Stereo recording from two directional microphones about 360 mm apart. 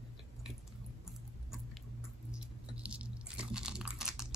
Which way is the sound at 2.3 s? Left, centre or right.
Centre.